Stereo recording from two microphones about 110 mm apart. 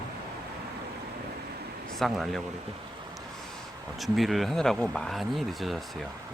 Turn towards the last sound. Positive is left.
turn(degrees=0)  # may be behind; listen again after turning